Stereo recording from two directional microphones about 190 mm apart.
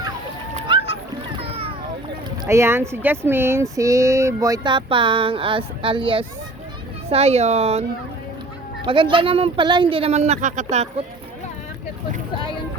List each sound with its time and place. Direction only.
0.5 s splash: 30° right (ahead or behind)
1.4 s boat: 30° right (ahead or behind)
2.4 s speech: 15° right (ahead or behind); by 10.8 s 40° right (ahead or behind)